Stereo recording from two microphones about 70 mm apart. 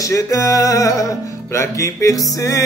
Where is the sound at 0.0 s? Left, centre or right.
Left.